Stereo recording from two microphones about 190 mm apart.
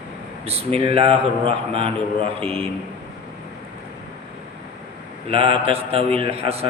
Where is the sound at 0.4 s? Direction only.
30° right (ahead or behind).